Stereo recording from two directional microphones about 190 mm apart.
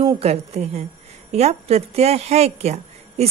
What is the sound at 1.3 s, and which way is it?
Speech, 35° right (ahead or behind).